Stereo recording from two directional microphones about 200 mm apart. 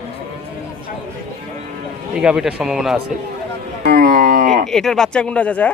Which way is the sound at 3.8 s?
45° right (ahead or behind).